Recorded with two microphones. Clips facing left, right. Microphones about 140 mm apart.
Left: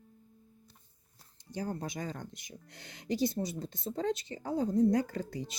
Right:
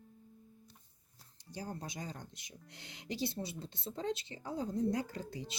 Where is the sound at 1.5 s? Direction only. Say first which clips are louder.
Left 6 dB; 60° left (ahead or behind).